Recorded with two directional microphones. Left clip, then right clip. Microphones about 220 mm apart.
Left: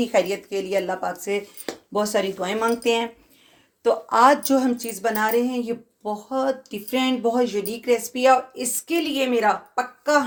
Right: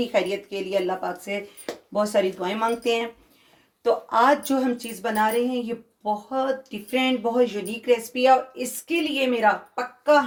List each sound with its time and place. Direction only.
0.0 s a woman's voice: 40° left (ahead or behind)